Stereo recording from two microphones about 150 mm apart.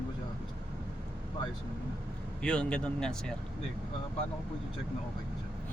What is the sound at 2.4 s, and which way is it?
Speech, 5° left (ahead or behind).